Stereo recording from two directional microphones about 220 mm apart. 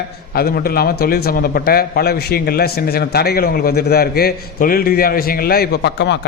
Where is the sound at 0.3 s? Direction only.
45° left (ahead or behind).